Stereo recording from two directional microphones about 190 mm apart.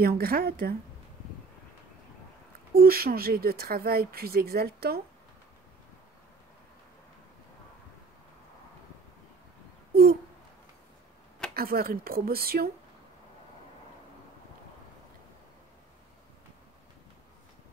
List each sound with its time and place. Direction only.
0.0 s speech: 50° right (ahead or behind)
2.7 s speech: 55° right (ahead or behind)
11.5 s speech: 50° right (ahead or behind)